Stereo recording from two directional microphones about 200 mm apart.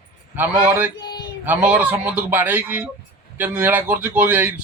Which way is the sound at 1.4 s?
10° right (ahead or behind).